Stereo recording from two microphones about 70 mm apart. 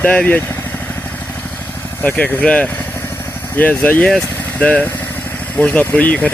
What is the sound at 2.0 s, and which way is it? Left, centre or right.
Speech, left.